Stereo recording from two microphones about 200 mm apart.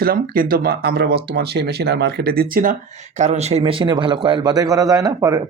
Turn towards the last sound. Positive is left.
turn(degrees=-15)  # may be behind; listen again after turning